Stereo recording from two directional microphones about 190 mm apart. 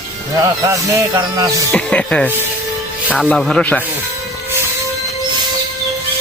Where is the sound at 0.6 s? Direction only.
15° right (ahead or behind).